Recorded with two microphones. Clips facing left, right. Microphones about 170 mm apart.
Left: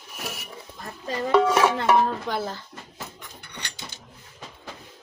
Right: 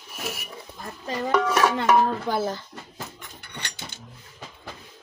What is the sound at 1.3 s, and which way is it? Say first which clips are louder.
Stir: left 4 dB; 30° left (ahead or behind).